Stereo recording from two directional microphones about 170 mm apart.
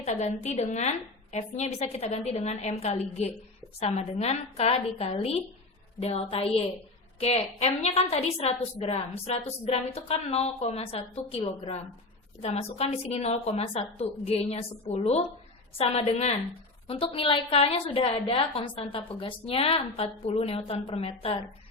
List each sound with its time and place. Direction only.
0.0 s a woman's voice: 40° left (ahead or behind)